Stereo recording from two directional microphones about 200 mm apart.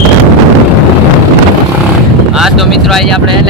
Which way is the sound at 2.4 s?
Centre (ahead or behind).